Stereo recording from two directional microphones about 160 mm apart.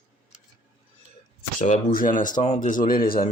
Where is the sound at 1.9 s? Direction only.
60° left (ahead or behind).